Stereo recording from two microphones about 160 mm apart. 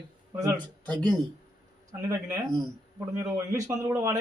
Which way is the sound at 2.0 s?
20° right (ahead or behind).